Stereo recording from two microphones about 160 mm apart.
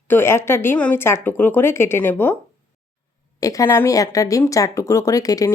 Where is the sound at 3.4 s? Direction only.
20° left (ahead or behind).